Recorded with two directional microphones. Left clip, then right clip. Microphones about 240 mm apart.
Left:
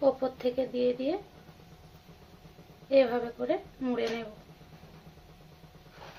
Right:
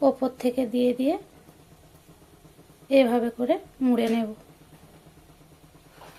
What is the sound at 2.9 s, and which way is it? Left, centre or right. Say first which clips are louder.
Speech: right 4 dB; right.